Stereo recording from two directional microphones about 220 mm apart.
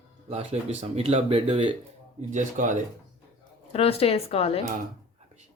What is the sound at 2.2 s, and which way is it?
Speech, 35° right (ahead or behind).